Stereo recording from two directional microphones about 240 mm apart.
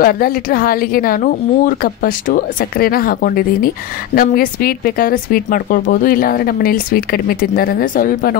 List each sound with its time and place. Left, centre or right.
0.0 s speech: left